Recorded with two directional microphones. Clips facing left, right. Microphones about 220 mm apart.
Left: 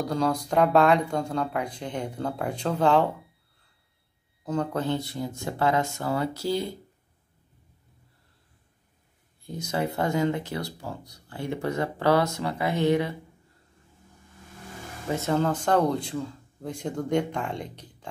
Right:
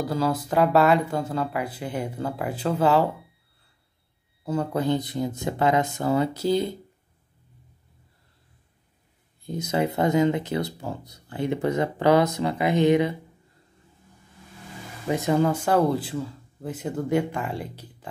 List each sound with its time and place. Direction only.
0.0 s speech: 5° right (ahead or behind)
4.5 s speech: 10° right (ahead or behind)
9.5 s speech: 20° right (ahead or behind)
15.0 s speech: 15° right (ahead or behind)